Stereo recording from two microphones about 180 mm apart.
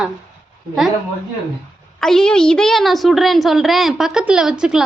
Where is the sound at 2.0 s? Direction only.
5° left (ahead or behind).